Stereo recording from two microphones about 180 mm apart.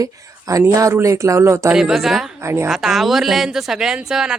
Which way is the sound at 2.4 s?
15° right (ahead or behind).